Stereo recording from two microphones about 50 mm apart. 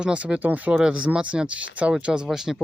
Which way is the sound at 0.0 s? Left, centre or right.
Right.